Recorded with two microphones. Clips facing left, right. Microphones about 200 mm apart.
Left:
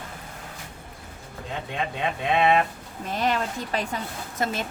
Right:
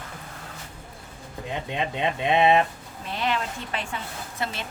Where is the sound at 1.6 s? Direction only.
20° right (ahead or behind).